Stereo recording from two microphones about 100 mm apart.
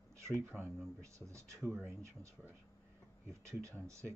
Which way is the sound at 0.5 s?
25° right (ahead or behind).